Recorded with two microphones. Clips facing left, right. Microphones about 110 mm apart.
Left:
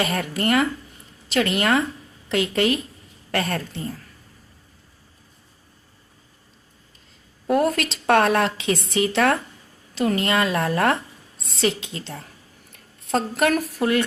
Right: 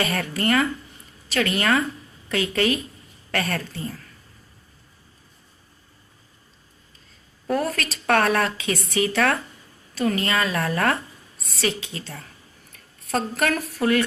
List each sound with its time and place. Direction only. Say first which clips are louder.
0.0 s a woman's voice: left 1 dB; 20° left (ahead or behind)
7.4 s a woman's voice: left 4 dB; 20° left (ahead or behind)